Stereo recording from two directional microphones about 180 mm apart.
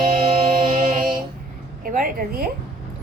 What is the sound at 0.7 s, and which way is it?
Mantra, 45° right (ahead or behind).